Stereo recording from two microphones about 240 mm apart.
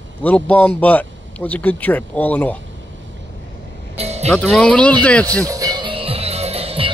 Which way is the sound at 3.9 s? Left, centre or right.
Right.